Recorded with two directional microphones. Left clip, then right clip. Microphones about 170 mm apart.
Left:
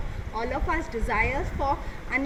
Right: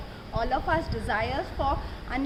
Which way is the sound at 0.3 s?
20° right (ahead or behind).